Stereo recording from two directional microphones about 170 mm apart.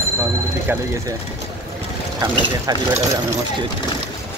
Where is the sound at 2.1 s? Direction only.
20° right (ahead or behind).